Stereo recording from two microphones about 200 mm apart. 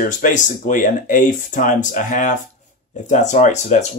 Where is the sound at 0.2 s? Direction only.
40° left (ahead or behind).